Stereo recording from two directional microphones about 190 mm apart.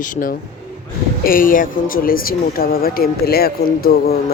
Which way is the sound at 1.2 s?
45° left (ahead or behind).